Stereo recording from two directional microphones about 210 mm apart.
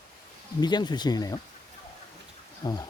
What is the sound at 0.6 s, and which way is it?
Speech, 20° left (ahead or behind).